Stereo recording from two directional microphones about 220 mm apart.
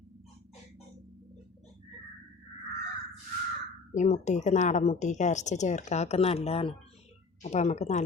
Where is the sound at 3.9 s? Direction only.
30° left (ahead or behind).